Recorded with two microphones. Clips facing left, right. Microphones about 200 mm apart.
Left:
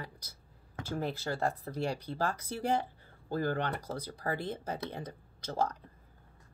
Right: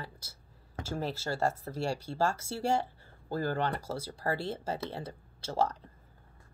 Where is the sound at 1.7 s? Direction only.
15° left (ahead or behind).